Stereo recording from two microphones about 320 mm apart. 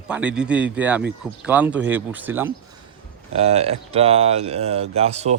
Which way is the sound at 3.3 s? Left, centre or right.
Centre.